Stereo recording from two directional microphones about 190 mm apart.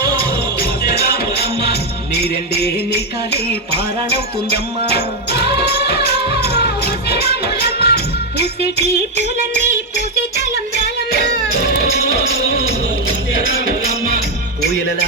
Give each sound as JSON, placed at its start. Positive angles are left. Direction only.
{"t": 0.9, "sound": "music", "side_deg": 55}
{"t": 5.6, "sound": "music of bollywood", "side_deg": 55}
{"t": 7.1, "sound": "music", "side_deg": 55}